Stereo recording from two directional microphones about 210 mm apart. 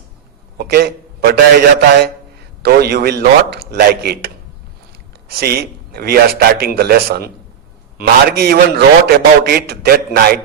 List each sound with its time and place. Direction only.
0.6 s a man's voice: 45° right (ahead or behind)
5.4 s a man's voice: 50° right (ahead or behind)